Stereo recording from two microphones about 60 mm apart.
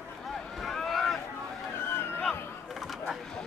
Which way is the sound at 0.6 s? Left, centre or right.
Centre.